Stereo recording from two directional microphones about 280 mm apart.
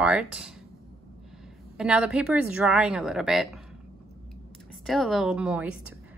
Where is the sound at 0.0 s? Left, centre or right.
Centre.